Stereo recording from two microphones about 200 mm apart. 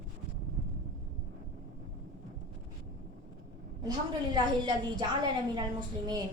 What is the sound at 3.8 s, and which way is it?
A woman's voice, 20° right (ahead or behind).